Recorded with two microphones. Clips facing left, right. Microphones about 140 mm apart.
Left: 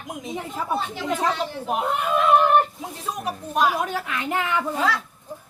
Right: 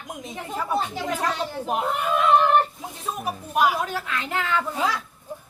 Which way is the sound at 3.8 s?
20° left (ahead or behind).